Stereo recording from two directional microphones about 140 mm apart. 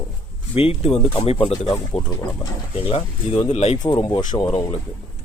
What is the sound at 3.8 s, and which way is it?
Speech, 30° left (ahead or behind).